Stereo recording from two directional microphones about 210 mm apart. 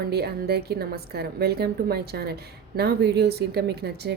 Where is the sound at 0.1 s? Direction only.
50° right (ahead or behind).